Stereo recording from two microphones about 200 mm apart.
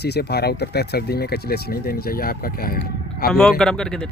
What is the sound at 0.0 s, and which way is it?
A man's voice, 55° left (ahead or behind).